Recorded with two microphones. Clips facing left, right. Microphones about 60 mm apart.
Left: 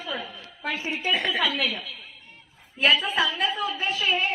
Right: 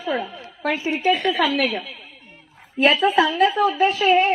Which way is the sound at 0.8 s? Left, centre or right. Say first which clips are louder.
Right 7 dB; right.